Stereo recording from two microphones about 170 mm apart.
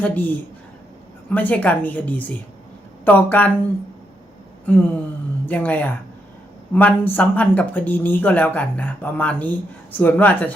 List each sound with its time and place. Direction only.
0.0 s speech: 10° left (ahead or behind)
4.6 s speech: 10° left (ahead or behind)